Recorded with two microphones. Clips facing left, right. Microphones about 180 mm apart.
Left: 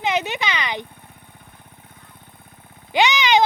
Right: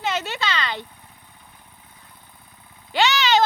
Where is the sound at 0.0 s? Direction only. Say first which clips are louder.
Left 3 dB; 15° left (ahead or behind).